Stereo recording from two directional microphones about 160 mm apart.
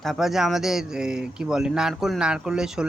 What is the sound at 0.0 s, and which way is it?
Speech, centre (ahead or behind).